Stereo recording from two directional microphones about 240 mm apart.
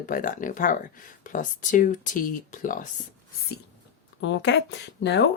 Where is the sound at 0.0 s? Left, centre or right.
Left.